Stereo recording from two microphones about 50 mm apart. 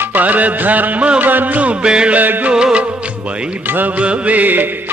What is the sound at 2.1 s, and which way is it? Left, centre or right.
Music, right.